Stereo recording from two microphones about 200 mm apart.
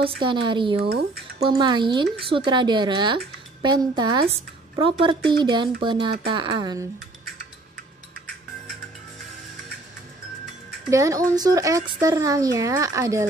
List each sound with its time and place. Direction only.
0.0 s speech: 25° right (ahead or behind)
0.8 s speech: 50° right (ahead or behind)
1.5 s speech: 20° right (ahead or behind)
10.9 s speech: 15° right (ahead or behind)